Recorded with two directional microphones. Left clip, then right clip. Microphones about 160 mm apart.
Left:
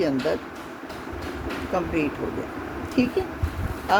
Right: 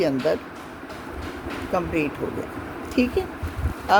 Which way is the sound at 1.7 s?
45° right (ahead or behind).